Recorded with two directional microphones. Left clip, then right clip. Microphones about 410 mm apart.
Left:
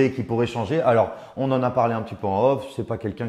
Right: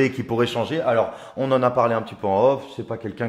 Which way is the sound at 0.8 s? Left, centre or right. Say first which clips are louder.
Left 2 dB; left.